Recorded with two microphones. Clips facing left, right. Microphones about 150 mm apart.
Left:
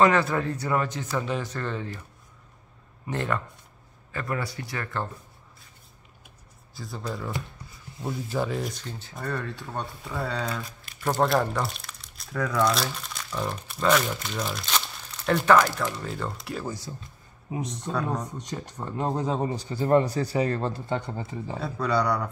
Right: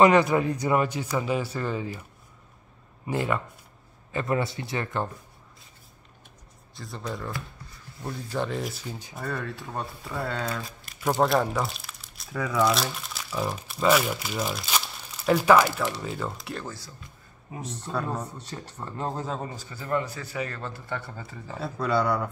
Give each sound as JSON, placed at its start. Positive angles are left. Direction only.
{"t": 0.0, "sound": "a man's voice", "side_deg": -15}
{"t": 3.1, "sound": "a man's voice", "side_deg": -10}
{"t": 4.1, "sound": "speech", "side_deg": -20}
{"t": 6.7, "sound": "speech", "side_deg": 0}
{"t": 8.0, "sound": "a man's voice", "side_deg": 20}
{"t": 8.4, "sound": "speech", "side_deg": 0}
{"t": 16.6, "sound": "speech", "side_deg": 15}
{"t": 17.9, "sound": "speech", "side_deg": -5}
{"t": 18.4, "sound": "speech", "side_deg": 15}
{"t": 19.7, "sound": "a man's voice", "side_deg": 35}
{"t": 21.5, "sound": "speech", "side_deg": 0}